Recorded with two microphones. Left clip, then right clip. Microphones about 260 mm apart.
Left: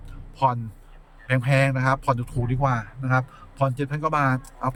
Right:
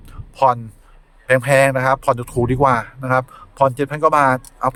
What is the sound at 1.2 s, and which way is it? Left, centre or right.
Speech, centre.